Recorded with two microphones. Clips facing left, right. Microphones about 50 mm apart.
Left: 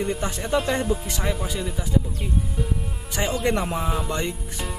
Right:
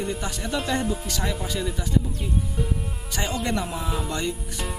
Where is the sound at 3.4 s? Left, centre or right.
Left.